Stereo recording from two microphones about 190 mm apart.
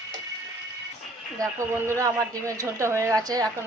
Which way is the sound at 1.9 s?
15° right (ahead or behind).